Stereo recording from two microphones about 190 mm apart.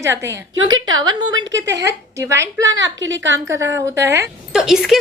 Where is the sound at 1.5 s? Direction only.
65° right (ahead or behind).